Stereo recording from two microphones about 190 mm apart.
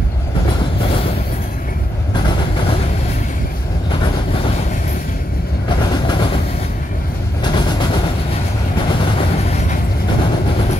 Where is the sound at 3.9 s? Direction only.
30° left (ahead or behind).